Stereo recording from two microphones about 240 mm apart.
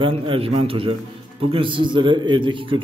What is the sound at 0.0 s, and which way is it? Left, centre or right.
A man's voice, right.